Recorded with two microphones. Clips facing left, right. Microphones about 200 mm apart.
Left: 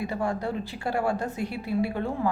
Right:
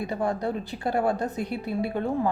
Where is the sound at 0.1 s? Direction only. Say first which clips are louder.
Right 2 dB; 20° right (ahead or behind).